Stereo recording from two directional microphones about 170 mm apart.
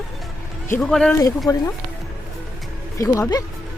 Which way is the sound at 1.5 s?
20° left (ahead or behind).